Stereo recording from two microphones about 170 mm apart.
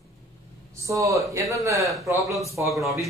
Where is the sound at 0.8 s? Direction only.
20° right (ahead or behind).